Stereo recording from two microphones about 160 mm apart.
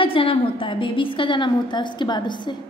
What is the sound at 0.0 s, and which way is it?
A woman's voice, 35° left (ahead or behind).